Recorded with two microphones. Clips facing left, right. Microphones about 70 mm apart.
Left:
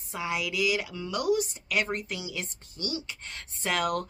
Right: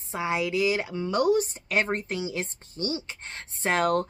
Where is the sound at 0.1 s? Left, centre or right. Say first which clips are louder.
Right 5 dB; right.